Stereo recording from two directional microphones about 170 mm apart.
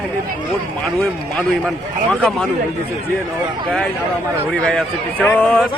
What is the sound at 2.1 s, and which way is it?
Speech, 5° left (ahead or behind).